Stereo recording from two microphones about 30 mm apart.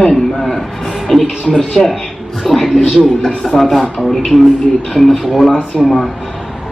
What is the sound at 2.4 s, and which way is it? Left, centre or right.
Speech, centre.